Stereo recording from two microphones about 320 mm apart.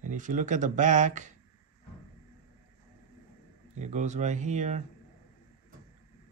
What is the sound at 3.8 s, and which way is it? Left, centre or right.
Speech, right.